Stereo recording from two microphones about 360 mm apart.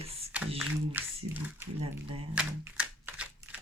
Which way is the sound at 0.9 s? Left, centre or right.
Centre.